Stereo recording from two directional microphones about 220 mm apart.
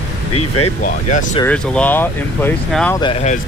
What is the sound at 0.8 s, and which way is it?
Speech, 35° left (ahead or behind).